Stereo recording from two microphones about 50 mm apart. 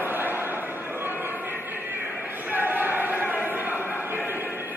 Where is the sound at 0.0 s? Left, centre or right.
Right.